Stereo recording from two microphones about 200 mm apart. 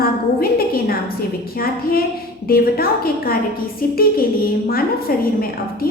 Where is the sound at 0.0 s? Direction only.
50° left (ahead or behind).